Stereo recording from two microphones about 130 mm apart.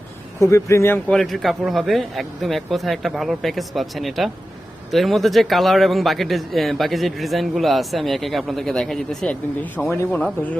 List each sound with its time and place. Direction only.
0.3 s speech: 25° left (ahead or behind)
1.1 s speech: centre (ahead or behind)